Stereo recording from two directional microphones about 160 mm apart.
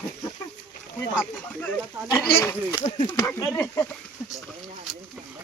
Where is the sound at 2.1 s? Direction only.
15° left (ahead or behind).